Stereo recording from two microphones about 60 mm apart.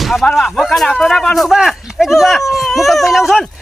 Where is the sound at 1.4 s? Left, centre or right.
Centre.